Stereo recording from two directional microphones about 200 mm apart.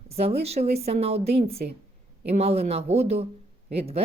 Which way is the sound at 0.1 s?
30° right (ahead or behind).